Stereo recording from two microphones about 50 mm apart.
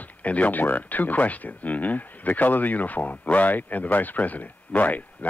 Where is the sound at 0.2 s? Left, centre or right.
Left.